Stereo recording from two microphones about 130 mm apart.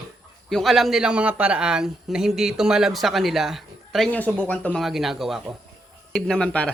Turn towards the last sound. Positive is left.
turn(degrees=10)  # may be behind; listen again after turning